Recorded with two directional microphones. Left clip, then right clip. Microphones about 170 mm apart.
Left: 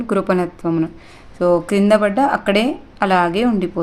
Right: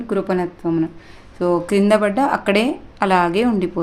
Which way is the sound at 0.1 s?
35° left (ahead or behind).